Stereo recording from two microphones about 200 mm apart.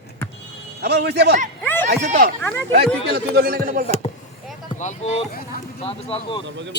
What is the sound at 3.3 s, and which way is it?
Speech, 50° right (ahead or behind).